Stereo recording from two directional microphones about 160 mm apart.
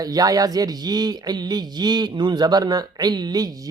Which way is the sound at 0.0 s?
25° right (ahead or behind).